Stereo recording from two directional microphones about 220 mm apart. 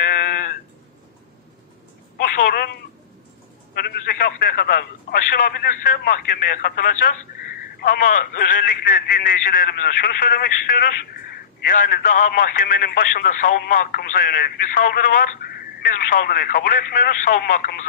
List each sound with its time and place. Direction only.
0.0 s sheep: 40° left (ahead or behind)
2.1 s telephone: 40° left (ahead or behind)
3.7 s speech: 45° left (ahead or behind)